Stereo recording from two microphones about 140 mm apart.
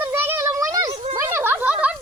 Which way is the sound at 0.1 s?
20° right (ahead or behind).